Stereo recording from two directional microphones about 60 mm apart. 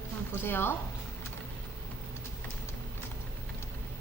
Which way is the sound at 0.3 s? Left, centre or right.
Left.